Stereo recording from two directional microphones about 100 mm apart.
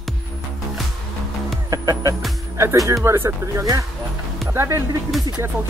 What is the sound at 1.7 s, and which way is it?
Music, 35° right (ahead or behind).